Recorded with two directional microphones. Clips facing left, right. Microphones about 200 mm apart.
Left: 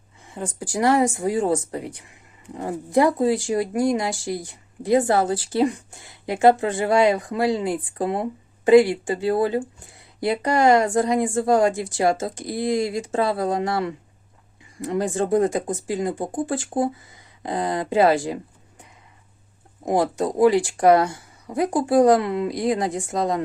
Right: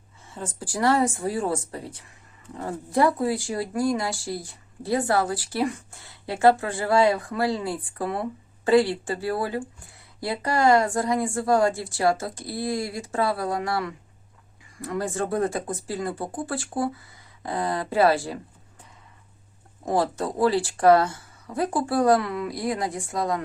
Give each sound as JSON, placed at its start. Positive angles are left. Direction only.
{"t": 0.3, "sound": "speech", "side_deg": 15}
{"t": 19.8, "sound": "speech", "side_deg": 15}